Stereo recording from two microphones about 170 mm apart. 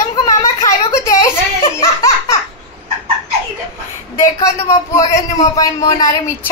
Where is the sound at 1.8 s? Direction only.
15° left (ahead or behind).